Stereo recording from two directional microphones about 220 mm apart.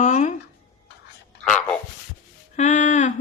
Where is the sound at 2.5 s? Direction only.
35° left (ahead or behind).